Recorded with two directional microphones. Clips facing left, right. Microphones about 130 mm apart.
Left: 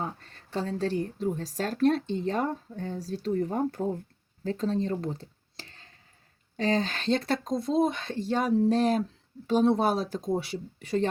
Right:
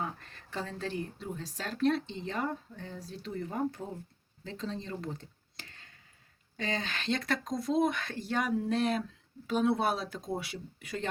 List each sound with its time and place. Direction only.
0.0 s speech: 35° left (ahead or behind)